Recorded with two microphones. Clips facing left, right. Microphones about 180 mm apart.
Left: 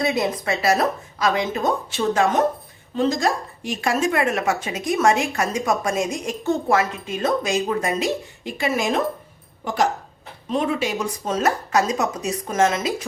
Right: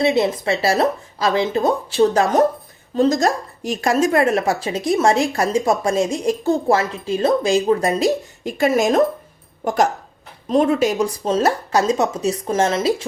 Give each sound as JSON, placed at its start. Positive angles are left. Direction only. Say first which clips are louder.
{"t": 0.0, "sound": "a woman's voice", "louder": "right 5 dB", "side_deg": -30}